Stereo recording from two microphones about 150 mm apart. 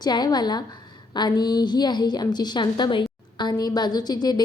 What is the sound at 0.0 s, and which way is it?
A woman's voice, 30° left (ahead or behind).